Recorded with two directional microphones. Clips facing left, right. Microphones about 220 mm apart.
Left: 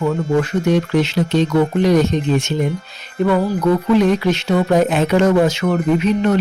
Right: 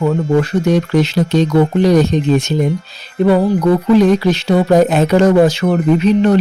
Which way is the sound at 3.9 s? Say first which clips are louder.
Right 5 dB; 35° right (ahead or behind).